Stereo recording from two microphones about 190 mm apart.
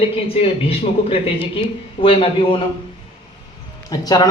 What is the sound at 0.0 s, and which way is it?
Speech, 30° left (ahead or behind).